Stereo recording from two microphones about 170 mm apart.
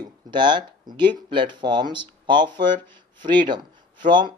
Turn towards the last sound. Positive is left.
turn(degrees=-25)  # may be behind; listen again after turning